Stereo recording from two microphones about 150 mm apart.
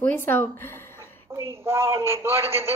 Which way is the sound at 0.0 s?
15° left (ahead or behind).